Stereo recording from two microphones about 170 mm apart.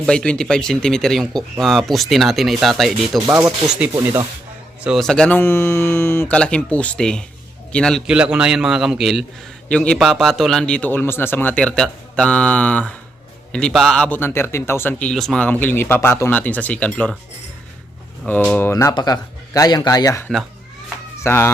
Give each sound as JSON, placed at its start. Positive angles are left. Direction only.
{"t": 0.0, "sound": "speech", "side_deg": 5}
{"t": 3.9, "sound": "speech", "side_deg": -15}
{"t": 4.8, "sound": "speech", "side_deg": 0}
{"t": 18.3, "sound": "speech", "side_deg": 10}
{"t": 18.7, "sound": "speech", "side_deg": 20}
{"t": 21.2, "sound": "speech", "side_deg": 15}